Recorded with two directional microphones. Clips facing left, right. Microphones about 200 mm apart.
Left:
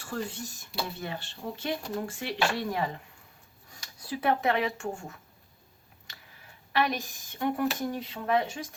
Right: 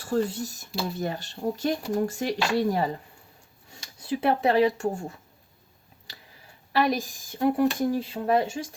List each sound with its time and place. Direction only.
0.0 s a woman's voice: 40° right (ahead or behind)
3.7 s speech: 25° right (ahead or behind)
6.1 s a sound: 35° right (ahead or behind)
6.7 s a woman's voice: 35° right (ahead or behind)